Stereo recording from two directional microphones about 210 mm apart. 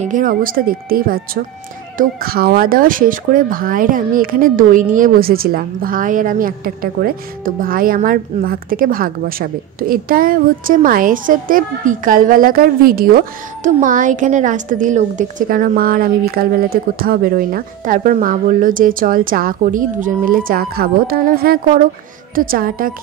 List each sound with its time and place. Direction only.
0.0 s a woman's voice: 40° right (ahead or behind)